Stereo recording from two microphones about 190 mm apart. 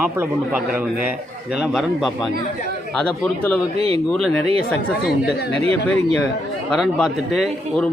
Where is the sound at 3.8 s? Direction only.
30° right (ahead or behind).